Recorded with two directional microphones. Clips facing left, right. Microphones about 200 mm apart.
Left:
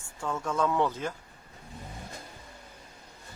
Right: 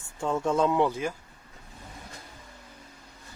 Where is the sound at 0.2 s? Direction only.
25° right (ahead or behind); by 1.1 s 10° right (ahead or behind).